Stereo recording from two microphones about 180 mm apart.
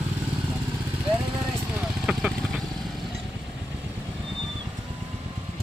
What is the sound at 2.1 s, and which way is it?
Vehicle, 5° right (ahead or behind).